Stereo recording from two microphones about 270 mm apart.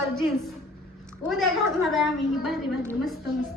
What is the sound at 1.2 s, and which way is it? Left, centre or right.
A woman's voice, centre.